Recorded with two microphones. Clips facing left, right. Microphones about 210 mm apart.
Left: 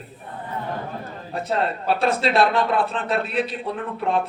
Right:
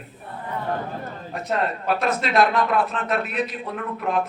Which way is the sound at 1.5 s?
30° left (ahead or behind).